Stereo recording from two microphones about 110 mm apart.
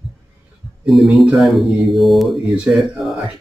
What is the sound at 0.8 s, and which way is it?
Speech, centre (ahead or behind).